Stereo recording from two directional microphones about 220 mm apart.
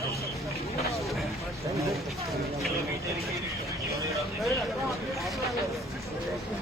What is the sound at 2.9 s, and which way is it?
Speech, 15° right (ahead or behind).